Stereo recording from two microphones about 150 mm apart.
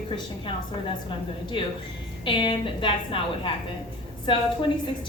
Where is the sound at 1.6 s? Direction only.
35° left (ahead or behind).